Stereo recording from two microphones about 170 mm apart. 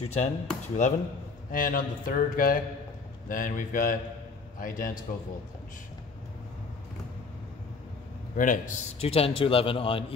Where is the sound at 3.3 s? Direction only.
55° left (ahead or behind).